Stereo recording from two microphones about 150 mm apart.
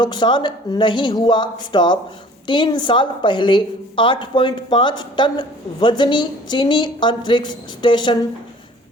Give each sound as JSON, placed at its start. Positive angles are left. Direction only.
{"t": 0.0, "sound": "a woman's voice", "side_deg": 30}